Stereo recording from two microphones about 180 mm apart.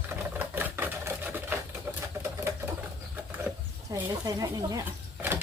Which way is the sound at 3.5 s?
5° right (ahead or behind).